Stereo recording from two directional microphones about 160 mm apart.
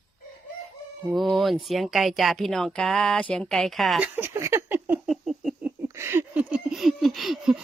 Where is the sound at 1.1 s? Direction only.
Centre (ahead or behind).